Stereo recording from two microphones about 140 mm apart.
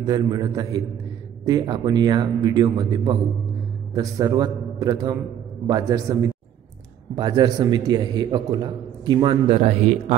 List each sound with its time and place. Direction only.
0.0 s a man's voice: 30° right (ahead or behind); by 10.1 s 50° right (ahead or behind)